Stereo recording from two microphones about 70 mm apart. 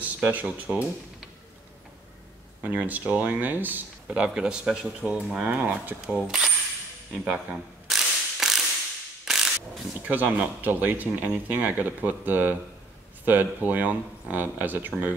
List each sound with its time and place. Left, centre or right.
0.0 s a sound: right
0.6 s speech: centre
2.6 s speech: right
4.3 s speech: centre
6.2 s coin: centre
7.3 s mechanisms: centre
10.0 s speech: right